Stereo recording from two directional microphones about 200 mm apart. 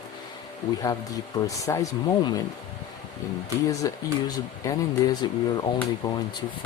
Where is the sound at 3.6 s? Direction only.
20° left (ahead or behind).